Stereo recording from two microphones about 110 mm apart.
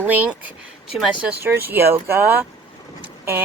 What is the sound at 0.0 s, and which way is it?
Speech, 15° right (ahead or behind).